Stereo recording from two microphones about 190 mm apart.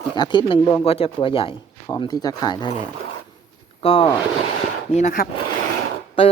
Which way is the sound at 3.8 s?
30° left (ahead or behind).